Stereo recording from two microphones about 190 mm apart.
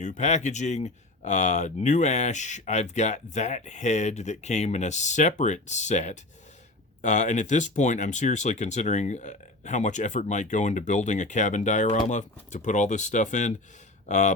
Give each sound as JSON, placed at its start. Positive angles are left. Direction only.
{"t": 0.0, "sound": "speech", "side_deg": 40}